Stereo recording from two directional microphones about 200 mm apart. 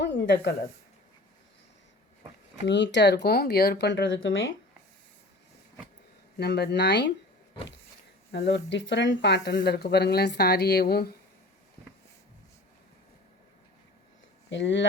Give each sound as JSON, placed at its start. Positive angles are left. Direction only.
{"t": 0.0, "sound": "a sound", "side_deg": 60}
{"t": 2.6, "sound": "speech", "side_deg": 60}
{"t": 6.3, "sound": "speech", "side_deg": 55}
{"t": 8.3, "sound": "a woman's voice", "side_deg": 60}
{"t": 14.5, "sound": "speech", "side_deg": 65}